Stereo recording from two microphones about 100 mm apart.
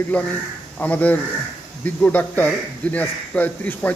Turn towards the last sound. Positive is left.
turn(degrees=15)  # may be behind; listen again after turning